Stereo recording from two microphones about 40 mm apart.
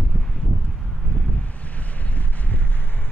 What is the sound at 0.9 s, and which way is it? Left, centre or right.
Vehicle, left.